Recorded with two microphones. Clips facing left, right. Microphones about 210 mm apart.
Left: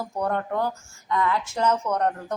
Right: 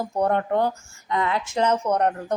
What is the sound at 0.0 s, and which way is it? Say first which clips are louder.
A woman's voice: right 4 dB; 25° right (ahead or behind).